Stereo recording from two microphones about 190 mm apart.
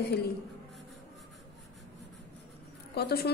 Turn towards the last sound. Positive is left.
turn(degrees=55)  # may be behind; listen again after turning